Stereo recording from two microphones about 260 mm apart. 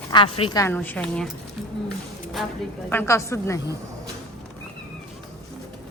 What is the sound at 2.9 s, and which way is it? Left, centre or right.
Speech, centre.